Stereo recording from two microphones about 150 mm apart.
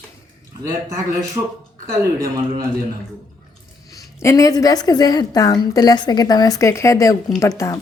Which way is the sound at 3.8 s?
20° left (ahead or behind).